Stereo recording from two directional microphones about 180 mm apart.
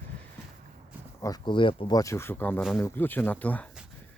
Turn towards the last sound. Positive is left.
turn(degrees=10)  # may be behind; listen again after turning